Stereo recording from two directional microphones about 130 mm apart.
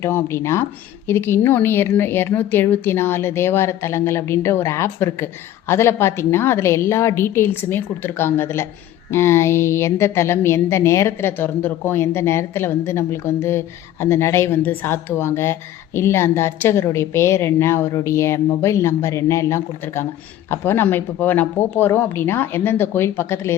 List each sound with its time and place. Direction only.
0.0 s a woman's voice: 20° left (ahead or behind)